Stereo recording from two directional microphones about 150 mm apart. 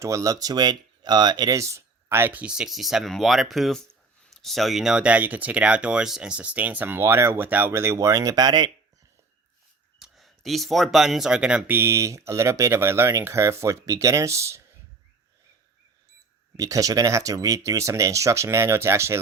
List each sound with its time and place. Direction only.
0.0 s speech: 20° right (ahead or behind)
10.0 s speech: centre (ahead or behind); by 14.6 s 20° right (ahead or behind)
16.6 s speech: 20° right (ahead or behind)